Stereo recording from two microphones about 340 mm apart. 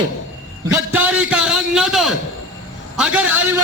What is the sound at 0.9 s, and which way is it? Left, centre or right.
A man's voice, centre.